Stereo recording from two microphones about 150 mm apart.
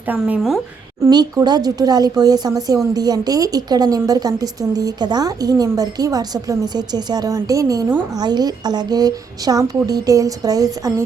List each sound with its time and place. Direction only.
0.0 s speech: 10° right (ahead or behind)
1.0 s a woman's voice: 25° right (ahead or behind)